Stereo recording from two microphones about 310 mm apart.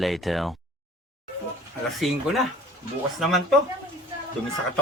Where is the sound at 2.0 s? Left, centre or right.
Centre.